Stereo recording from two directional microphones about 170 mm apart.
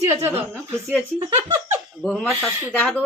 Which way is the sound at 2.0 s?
5° left (ahead or behind).